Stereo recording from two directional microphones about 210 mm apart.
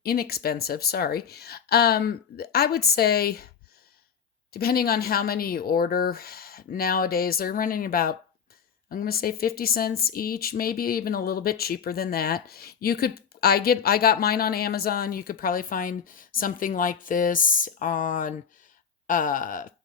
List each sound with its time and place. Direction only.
0.0 s speech: 45° left (ahead or behind)
4.5 s speech: 45° left (ahead or behind)